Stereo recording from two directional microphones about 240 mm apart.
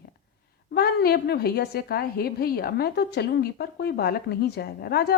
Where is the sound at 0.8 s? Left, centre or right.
Left.